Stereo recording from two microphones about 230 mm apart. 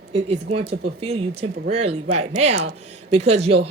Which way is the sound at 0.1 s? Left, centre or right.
Right.